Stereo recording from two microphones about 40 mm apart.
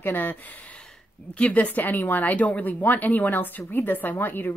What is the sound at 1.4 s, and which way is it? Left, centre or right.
A woman's voice, left.